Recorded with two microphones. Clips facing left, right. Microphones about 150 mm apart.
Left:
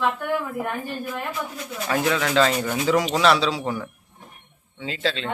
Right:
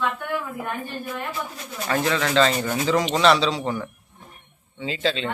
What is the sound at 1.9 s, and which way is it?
Speech, 5° left (ahead or behind).